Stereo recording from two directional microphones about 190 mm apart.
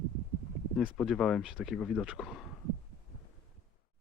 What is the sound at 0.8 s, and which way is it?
Speech, centre (ahead or behind).